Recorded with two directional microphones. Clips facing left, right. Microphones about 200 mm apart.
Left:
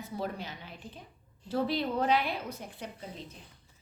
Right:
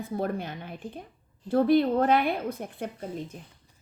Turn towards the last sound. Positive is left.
turn(degrees=-50)  # may be behind; listen again after turning